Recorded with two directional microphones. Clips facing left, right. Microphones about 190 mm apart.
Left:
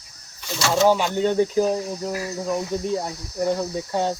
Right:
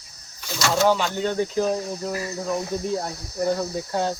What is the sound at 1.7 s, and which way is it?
Speech, 5° left (ahead or behind).